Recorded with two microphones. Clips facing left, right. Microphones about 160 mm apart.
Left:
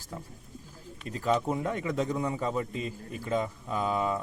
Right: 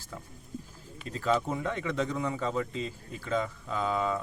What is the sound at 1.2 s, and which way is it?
A man's voice, 20° left (ahead or behind).